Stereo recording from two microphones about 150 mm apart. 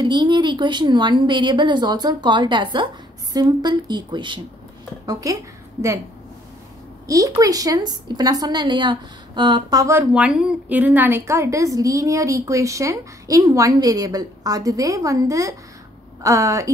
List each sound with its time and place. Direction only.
0.0 s a woman's voice: 30° right (ahead or behind)
7.1 s a woman's voice: 20° right (ahead or behind)
10.1 s a woman's voice: 10° right (ahead or behind)